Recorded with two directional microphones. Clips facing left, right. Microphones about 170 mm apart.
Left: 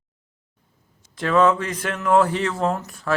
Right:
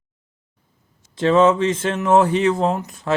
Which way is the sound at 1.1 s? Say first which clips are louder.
Right 3 dB; 25° right (ahead or behind).